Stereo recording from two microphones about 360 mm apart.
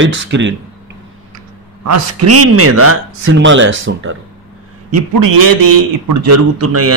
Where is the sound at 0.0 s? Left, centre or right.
Right.